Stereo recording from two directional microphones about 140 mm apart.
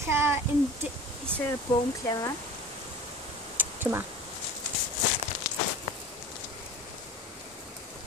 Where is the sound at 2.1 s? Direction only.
25° left (ahead or behind).